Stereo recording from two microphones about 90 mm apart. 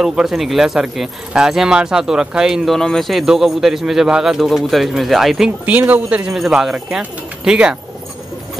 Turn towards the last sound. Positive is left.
turn(degrees=-10)  # may be behind; listen again after turning